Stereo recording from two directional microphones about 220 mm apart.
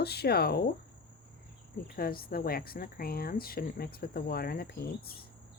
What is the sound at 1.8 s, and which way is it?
Speech, 40° left (ahead or behind).